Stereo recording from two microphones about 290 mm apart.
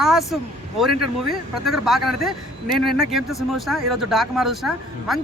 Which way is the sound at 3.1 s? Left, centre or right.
Centre.